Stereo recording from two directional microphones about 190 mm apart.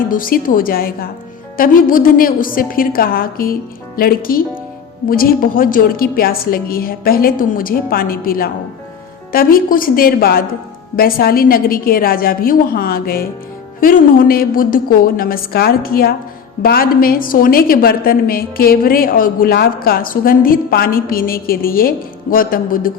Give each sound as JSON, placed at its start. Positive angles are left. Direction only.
{"t": 0.1, "sound": "a woman's voice", "side_deg": 45}